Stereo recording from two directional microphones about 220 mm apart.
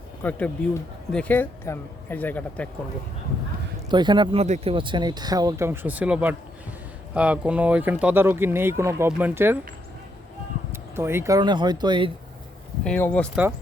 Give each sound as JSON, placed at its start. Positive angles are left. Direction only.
{"t": 0.2, "sound": "speech", "side_deg": 5}
{"t": 3.8, "sound": "speech", "side_deg": -20}
{"t": 10.7, "sound": "speech", "side_deg": -10}
{"t": 12.8, "sound": "speech", "side_deg": 5}